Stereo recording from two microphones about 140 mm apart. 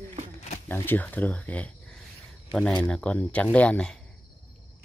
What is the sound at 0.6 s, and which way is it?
Speech, 15° left (ahead or behind).